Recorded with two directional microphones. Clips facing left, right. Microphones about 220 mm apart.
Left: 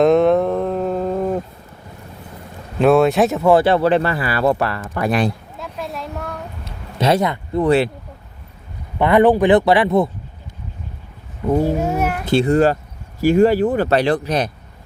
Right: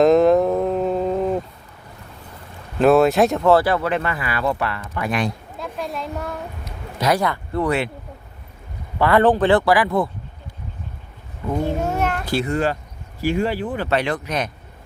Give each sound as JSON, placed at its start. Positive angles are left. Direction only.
{"t": 0.0, "sound": "a sound", "side_deg": 0}
{"t": 2.7, "sound": "speech", "side_deg": 0}
{"t": 3.5, "sound": "speech", "side_deg": 25}
{"t": 5.5, "sound": "a sound", "side_deg": 0}
{"t": 6.7, "sound": "speech", "side_deg": 25}
{"t": 9.0, "sound": "speech", "side_deg": 20}
{"t": 11.5, "sound": "speech", "side_deg": 10}
{"t": 12.2, "sound": "speech", "side_deg": 25}
{"t": 13.2, "sound": "speech", "side_deg": 45}